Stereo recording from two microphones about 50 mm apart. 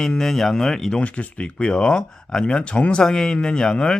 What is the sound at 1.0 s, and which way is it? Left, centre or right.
Speech, left.